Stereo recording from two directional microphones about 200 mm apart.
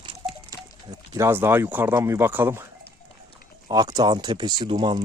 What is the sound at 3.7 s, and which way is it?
Speech, 20° right (ahead or behind).